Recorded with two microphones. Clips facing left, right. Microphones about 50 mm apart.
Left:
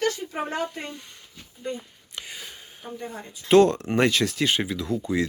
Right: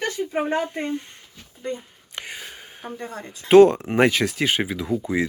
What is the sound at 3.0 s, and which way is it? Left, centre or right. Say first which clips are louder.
Speech: even; right.